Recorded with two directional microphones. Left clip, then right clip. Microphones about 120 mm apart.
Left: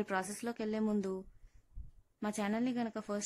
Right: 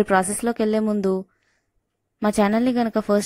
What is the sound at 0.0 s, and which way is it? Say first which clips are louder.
Speech: right 18 dB; 40° right (ahead or behind).